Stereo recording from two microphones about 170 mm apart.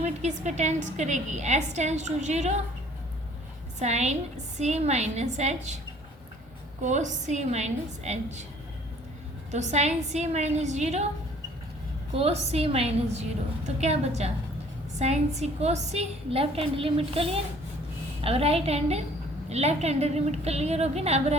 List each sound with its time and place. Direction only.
0.0 s a woman's voice: 45° right (ahead or behind)
3.8 s a woman's voice: 40° right (ahead or behind)
6.8 s a woman's voice: 45° right (ahead or behind)
9.5 s a woman's voice: 40° right (ahead or behind)
12.1 s a woman's voice: 35° right (ahead or behind)